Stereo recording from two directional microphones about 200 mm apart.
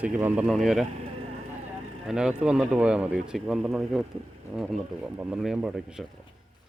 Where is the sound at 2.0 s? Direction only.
5° right (ahead or behind).